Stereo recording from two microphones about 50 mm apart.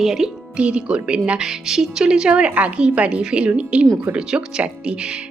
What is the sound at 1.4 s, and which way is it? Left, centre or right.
A woman's voice, centre.